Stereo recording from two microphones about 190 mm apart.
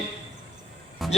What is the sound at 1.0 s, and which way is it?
Speech, centre (ahead or behind).